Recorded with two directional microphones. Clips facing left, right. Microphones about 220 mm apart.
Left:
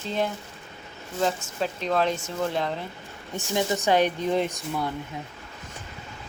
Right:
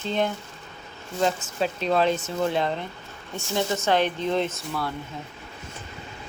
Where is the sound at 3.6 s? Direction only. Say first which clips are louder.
Left 1 dB; 15° left (ahead or behind).